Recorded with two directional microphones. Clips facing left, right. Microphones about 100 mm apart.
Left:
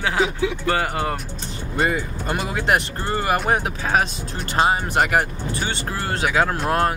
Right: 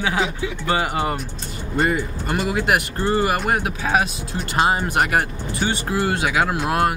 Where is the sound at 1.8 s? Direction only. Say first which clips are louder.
Right 1 dB; centre (ahead or behind).